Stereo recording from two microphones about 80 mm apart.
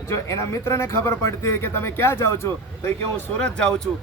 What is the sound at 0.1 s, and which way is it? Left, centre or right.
Speech, left.